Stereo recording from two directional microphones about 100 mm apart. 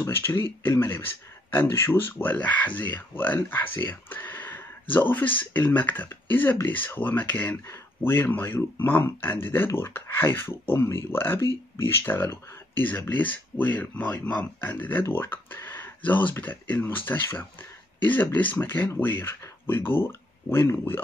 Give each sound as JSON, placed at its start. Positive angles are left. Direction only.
{"t": 0.0, "sound": "speech", "side_deg": 20}